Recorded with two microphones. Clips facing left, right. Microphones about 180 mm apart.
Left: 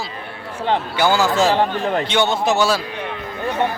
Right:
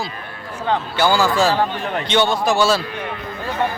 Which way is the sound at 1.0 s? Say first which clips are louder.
Even; 20° left (ahead or behind).